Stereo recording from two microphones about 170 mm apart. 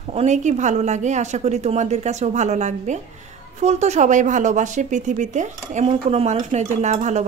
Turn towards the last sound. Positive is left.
turn(degrees=-40)  # may be behind; listen again after turning